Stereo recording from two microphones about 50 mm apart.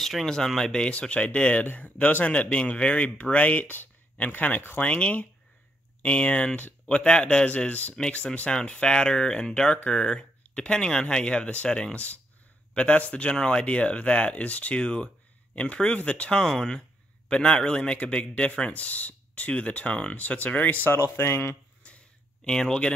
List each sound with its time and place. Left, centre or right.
0.0 s speech: centre
0.8 s a man's voice: left
3.7 s speech: left
4.8 s a man's voice: left
12.7 s a man's voice: left
16.4 s a man's voice: centre; by 20.9 s left
20.9 s speech: left
21.8 s a sound: left
22.4 s speech: centre